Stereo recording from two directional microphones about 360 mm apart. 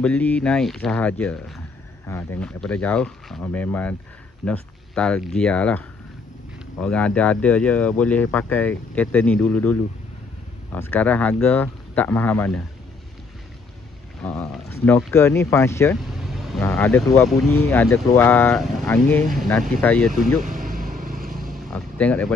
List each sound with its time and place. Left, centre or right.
0.0 s speech: centre
14.2 s speech: centre
20.4 s vehicle: right
21.5 s vehicle: centre